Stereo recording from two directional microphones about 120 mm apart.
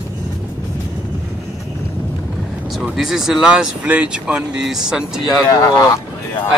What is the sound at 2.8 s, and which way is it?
Speech, centre (ahead or behind).